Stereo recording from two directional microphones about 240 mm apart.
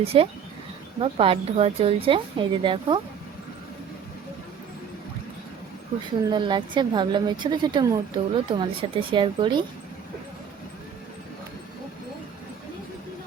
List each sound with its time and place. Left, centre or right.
0.0 s a woman's voice: right
6.3 s a woman's voice: centre